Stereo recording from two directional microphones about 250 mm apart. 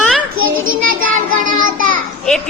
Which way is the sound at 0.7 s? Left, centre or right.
Right.